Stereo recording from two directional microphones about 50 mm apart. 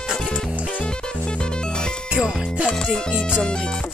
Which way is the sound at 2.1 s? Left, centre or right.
Right.